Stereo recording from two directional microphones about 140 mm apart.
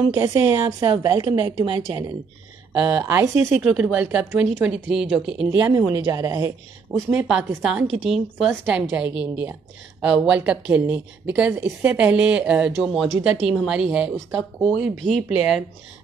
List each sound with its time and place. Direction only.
0.1 s a woman's voice: 25° right (ahead or behind)
2.8 s speech: 15° right (ahead or behind)
5.6 s a woman's voice: 20° right (ahead or behind)
7.1 s a woman's voice: 10° right (ahead or behind)